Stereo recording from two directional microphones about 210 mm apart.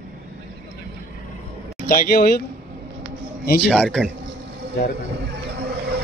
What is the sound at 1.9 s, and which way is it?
Speech, 45° left (ahead or behind).